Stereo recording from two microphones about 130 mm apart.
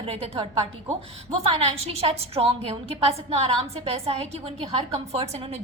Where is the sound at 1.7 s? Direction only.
50° right (ahead or behind).